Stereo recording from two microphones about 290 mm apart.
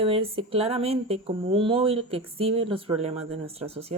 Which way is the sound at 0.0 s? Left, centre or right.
Centre.